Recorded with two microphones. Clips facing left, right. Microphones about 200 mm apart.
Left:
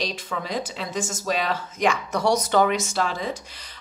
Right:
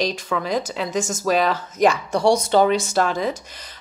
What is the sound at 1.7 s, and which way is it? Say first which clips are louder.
Speech: right 5 dB; 35° right (ahead or behind).